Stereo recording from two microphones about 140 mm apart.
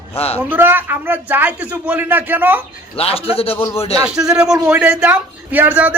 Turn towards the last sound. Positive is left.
turn(degrees=-10)  # may be behind; listen again after turning